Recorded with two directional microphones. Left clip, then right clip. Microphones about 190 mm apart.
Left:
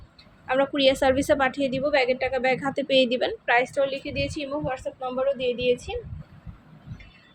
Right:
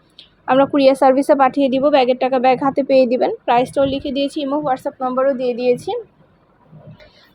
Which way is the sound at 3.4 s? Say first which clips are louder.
Right 5 dB; 20° right (ahead or behind).